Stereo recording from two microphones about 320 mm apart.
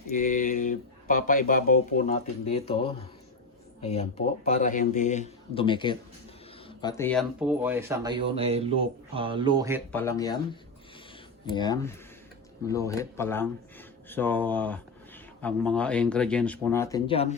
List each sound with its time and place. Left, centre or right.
0.1 s speech: left
3.8 s speech: centre
9.9 s speech: centre